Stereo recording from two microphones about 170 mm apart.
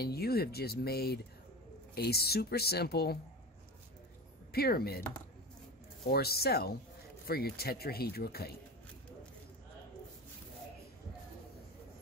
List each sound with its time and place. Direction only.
0.0 s speech: 65° left (ahead or behind)
4.5 s speech: 65° left (ahead or behind)
6.0 s speech: 65° left (ahead or behind)